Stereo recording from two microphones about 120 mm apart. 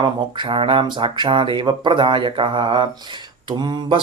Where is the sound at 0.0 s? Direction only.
45° right (ahead or behind).